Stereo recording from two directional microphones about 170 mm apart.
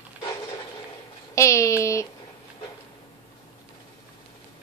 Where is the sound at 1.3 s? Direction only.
15° left (ahead or behind).